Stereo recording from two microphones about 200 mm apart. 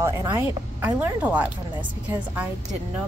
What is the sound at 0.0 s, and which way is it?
A woman's voice, 10° right (ahead or behind).